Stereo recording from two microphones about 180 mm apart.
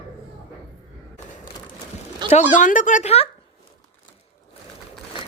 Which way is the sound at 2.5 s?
45° left (ahead or behind).